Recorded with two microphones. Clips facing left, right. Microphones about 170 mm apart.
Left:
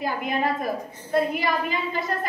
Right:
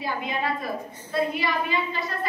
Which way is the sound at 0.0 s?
45° left (ahead or behind).